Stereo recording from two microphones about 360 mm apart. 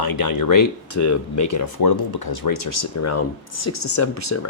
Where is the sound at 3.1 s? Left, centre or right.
Left.